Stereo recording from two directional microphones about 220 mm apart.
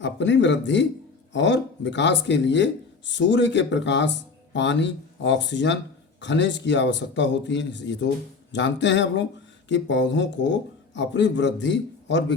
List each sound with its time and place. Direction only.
0.0 s speech: 55° left (ahead or behind)